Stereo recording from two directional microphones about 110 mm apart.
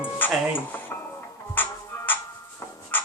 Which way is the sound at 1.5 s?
20° left (ahead or behind).